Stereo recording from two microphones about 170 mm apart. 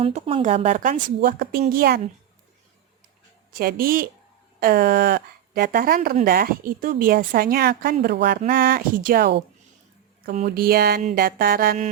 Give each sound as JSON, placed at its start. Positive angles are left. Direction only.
{"t": 0.0, "sound": "speech", "side_deg": -30}
{"t": 1.2, "sound": "speech", "side_deg": -60}
{"t": 3.5, "sound": "speech", "side_deg": -60}
{"t": 10.4, "sound": "speech", "side_deg": -65}